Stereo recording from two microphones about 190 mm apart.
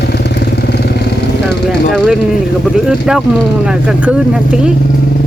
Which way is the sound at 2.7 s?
5° right (ahead or behind).